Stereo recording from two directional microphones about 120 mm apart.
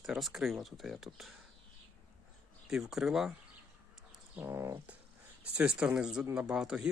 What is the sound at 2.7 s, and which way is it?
Speech, 5° right (ahead or behind).